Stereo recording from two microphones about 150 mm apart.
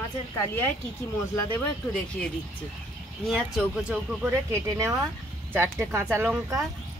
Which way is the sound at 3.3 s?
Centre (ahead or behind).